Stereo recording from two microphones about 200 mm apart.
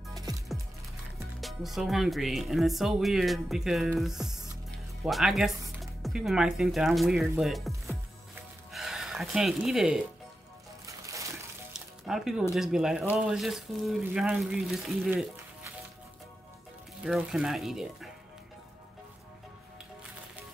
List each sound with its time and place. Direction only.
0.1 s music: 15° right (ahead or behind)
1.4 s speech: centre (ahead or behind)
8.7 s speech: centre (ahead or behind)
10.9 s music: 15° right (ahead or behind)
11.7 s music: 5° right (ahead or behind)
12.5 s speech: centre (ahead or behind)
17.0 s speech: centre (ahead or behind)